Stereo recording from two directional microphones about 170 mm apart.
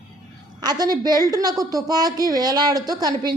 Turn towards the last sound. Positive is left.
turn(degrees=-25)  # may be behind; listen again after turning